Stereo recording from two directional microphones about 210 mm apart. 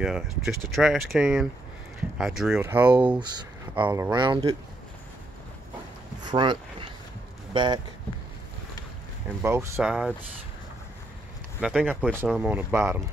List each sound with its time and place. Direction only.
0.0 s speech: centre (ahead or behind)
3.2 s speech: 20° right (ahead or behind)
6.2 s a sound: 20° right (ahead or behind)
7.5 s speech: 20° right (ahead or behind)
9.4 s speech: 10° right (ahead or behind)
11.6 s speech: 5° right (ahead or behind)